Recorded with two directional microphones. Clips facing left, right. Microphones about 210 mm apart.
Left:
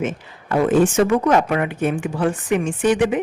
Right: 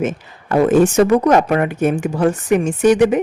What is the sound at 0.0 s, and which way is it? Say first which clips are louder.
Speech: right 4 dB; 45° right (ahead or behind).